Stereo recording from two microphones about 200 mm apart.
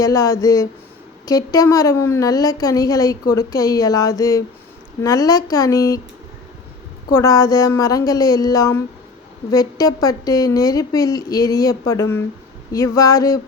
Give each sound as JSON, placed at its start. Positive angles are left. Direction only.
{"t": 0.0, "sound": "a woman's voice", "side_deg": 15}
{"t": 7.1, "sound": "a woman's voice", "side_deg": 15}